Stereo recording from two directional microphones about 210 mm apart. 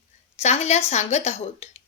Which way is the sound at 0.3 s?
30° left (ahead or behind).